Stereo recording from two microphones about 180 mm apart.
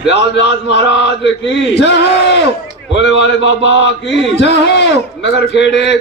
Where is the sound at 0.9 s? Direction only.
75° left (ahead or behind).